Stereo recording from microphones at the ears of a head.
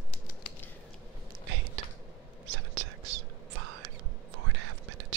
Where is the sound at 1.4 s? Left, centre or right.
Right.